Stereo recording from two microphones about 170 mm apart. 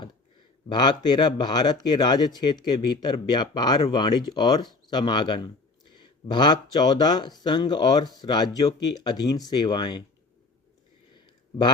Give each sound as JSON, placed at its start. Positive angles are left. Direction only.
{"t": 0.7, "sound": "speech", "side_deg": 25}